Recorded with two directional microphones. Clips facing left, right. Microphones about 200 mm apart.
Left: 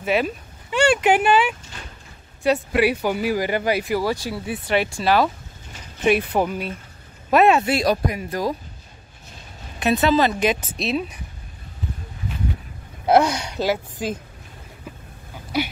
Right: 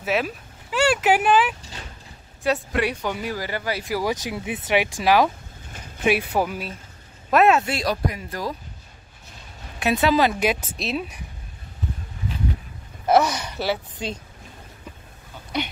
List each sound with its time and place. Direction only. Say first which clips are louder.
0.0 s speech: left 3 dB; centre (ahead or behind)
3.3 s speech: left 6 dB; 20° left (ahead or behind)
4.0 s speech: left 1 dB; 15° right (ahead or behind); by 7.7 s centre (ahead or behind)
7.7 s speech: left 5 dB; 15° left (ahead or behind)
9.8 s speech: left 1 dB; 10° right (ahead or behind)
13.0 s speech: left 2 dB; 15° left (ahead or behind)
15.5 s a sound: left 3 dB; 5° left (ahead or behind)